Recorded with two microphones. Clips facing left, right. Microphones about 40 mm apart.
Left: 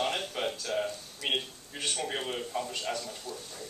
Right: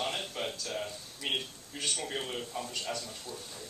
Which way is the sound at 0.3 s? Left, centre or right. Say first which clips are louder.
Left 4 dB; centre.